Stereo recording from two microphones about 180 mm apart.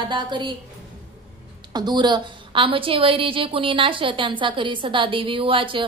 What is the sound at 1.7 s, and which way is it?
A woman's voice, 25° right (ahead or behind).